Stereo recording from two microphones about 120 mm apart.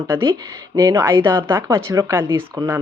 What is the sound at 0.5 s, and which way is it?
Speech, 25° right (ahead or behind).